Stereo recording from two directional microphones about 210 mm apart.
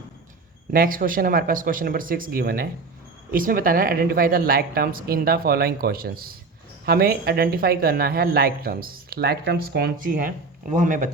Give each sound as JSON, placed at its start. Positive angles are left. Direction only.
{"t": 0.7, "sound": "speech", "side_deg": -40}